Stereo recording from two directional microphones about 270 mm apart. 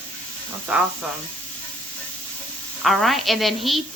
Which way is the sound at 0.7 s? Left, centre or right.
Centre.